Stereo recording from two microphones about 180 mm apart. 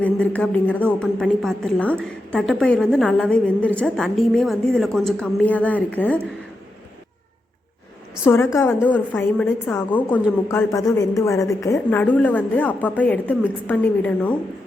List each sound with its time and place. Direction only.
0.0 s a woman's voice: 10° left (ahead or behind)
8.2 s a woman's voice: 15° left (ahead or behind)